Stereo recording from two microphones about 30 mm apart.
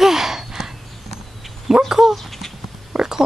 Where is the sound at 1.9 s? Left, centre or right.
Centre.